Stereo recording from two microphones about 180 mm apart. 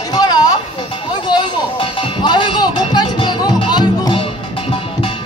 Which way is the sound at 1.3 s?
25° left (ahead or behind).